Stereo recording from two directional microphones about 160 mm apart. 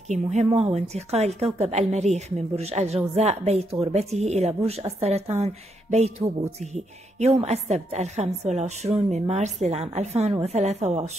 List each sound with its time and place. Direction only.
0.1 s a woman's voice: 45° right (ahead or behind)
3.2 s a sound: 40° right (ahead or behind)
6.6 s a woman's voice: 45° right (ahead or behind)